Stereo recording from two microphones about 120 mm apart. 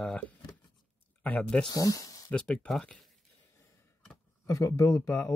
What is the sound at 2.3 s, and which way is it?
Speech, 5° left (ahead or behind).